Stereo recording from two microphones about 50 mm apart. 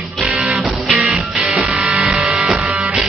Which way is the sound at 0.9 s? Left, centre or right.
Right.